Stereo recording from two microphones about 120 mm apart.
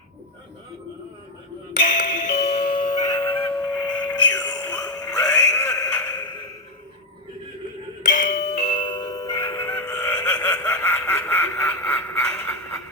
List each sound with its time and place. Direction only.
1.8 s music: 90° left; by 2.6 s 75° left (ahead or behind)
2.6 s a sound: 45° left (ahead or behind); by 6.2 s 15° left (ahead or behind)
8.0 s music: 90° left
8.5 s music: 50° left (ahead or behind); by 12.7 s 15° left (ahead or behind)